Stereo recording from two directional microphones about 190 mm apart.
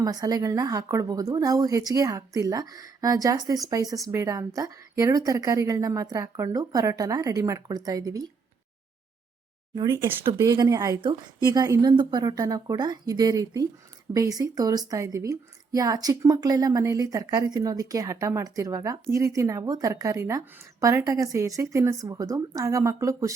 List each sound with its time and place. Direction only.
0.0 s a woman's voice: 20° right (ahead or behind)
9.7 s a woman's voice: 15° right (ahead or behind)